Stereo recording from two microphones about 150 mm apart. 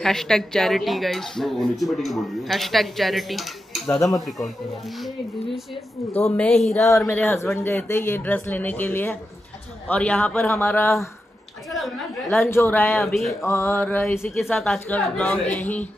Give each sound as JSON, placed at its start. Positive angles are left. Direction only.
{"t": 0.0, "sound": "speech", "side_deg": 5}
{"t": 6.3, "sound": "speech", "side_deg": 5}
{"t": 6.9, "sound": "speech", "side_deg": 20}
{"t": 12.3, "sound": "speech", "side_deg": 15}
{"t": 13.0, "sound": "speech", "side_deg": 0}
{"t": 13.3, "sound": "speech", "side_deg": 20}
{"t": 14.4, "sound": "speech", "side_deg": 5}